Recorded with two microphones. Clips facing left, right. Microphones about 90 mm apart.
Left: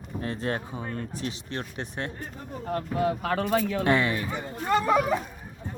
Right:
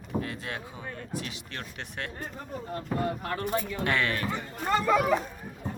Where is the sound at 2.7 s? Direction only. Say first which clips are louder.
Left 5 dB; 85° left.